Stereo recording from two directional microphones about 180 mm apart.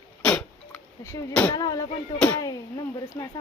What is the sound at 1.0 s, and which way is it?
Speech, 15° left (ahead or behind).